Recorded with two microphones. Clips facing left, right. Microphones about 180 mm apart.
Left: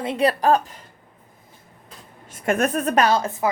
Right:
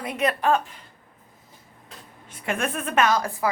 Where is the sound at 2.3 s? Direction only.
45° left (ahead or behind); by 3.5 s 20° left (ahead or behind).